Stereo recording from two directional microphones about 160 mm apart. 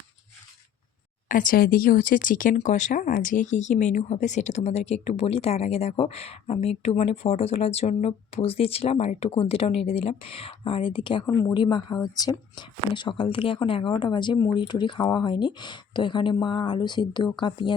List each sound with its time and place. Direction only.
1.3 s speech: 60° left (ahead or behind); by 11.3 s 30° left (ahead or behind)
11.3 s a woman's voice: 15° left (ahead or behind)
11.5 s speech: 30° left (ahead or behind)